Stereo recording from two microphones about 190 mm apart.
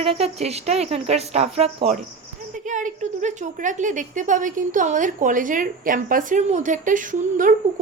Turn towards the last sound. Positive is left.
turn(degrees=-45)  # may be behind; listen again after turning